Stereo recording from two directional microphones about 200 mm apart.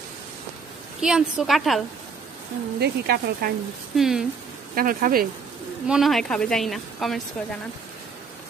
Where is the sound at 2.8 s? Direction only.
55° right (ahead or behind).